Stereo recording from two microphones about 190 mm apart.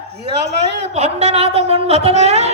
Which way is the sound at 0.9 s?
35° right (ahead or behind).